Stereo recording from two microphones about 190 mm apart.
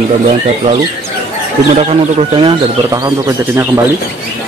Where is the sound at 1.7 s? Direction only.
35° right (ahead or behind).